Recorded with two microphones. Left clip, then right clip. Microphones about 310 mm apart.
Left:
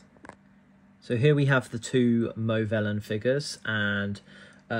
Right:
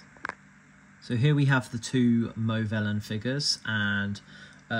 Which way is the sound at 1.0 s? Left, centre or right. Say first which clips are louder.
Left 5 dB; centre.